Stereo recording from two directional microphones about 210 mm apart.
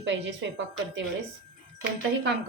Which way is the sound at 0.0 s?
60° right (ahead or behind).